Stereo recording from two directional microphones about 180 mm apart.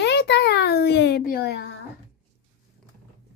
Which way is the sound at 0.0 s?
70° left (ahead or behind).